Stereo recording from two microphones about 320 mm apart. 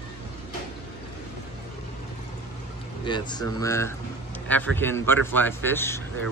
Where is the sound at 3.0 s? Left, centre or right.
Centre.